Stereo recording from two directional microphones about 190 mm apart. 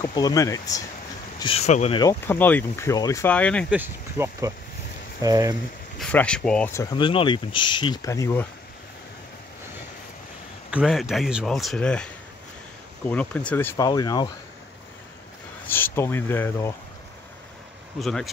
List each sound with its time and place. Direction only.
0.0 s speech: 20° left (ahead or behind)
1.4 s speech: 35° left (ahead or behind)
2.0 s speech: 15° left (ahead or behind)
3.7 s speech: 10° right (ahead or behind)
5.9 s speech: 5° left (ahead or behind)
6.7 s speech: 20° left (ahead or behind)
10.7 s speech: centre (ahead or behind); by 14.3 s 20° left (ahead or behind)
15.7 s speech: 10° left (ahead or behind)
18.0 s speech: centre (ahead or behind)